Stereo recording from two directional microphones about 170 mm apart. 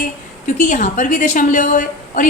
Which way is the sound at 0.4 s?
45° left (ahead or behind).